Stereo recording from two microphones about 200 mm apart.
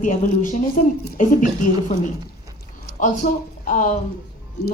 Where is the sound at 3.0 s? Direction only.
40° left (ahead or behind).